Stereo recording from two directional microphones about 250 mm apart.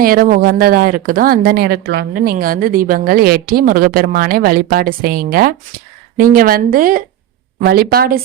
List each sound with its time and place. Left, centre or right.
0.0 s speech: right